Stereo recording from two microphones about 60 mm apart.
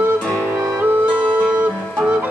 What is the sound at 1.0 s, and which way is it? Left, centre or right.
Music, left.